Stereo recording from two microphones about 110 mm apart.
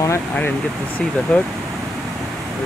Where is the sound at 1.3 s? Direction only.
10° left (ahead or behind).